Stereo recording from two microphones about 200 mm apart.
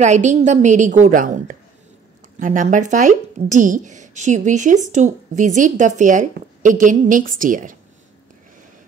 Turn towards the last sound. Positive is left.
turn(degrees=-40)  # may be behind; listen again after turning